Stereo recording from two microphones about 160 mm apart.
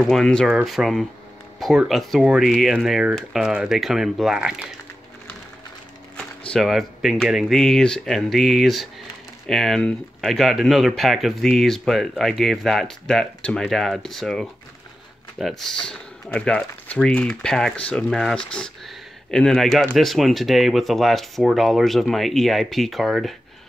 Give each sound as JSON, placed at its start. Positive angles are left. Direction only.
{"t": 0.0, "sound": "speech", "side_deg": 5}
{"t": 6.5, "sound": "speech", "side_deg": 0}